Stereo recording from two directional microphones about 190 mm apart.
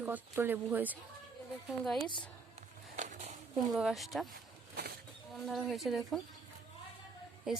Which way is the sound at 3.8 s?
Centre (ahead or behind).